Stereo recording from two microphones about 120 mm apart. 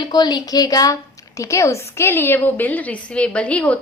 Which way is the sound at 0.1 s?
35° left (ahead or behind).